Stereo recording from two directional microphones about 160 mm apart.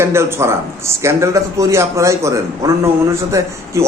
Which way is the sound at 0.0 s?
15° right (ahead or behind).